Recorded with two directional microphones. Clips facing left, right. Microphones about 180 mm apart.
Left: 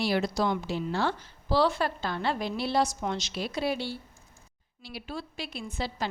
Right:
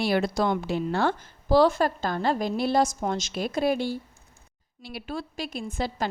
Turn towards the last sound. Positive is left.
turn(degrees=-50)  # may be behind; listen again after turning